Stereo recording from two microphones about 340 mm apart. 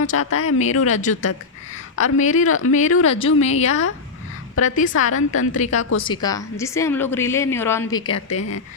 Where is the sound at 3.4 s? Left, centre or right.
Centre.